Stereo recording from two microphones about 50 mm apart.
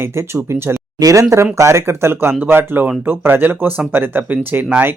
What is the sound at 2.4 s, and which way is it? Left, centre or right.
Speech, right.